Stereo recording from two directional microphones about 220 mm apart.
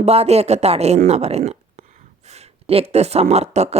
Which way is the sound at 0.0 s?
30° right (ahead or behind).